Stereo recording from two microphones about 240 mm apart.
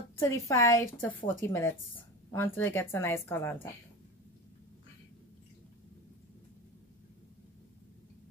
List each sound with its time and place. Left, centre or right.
0.2 s a woman's voice: centre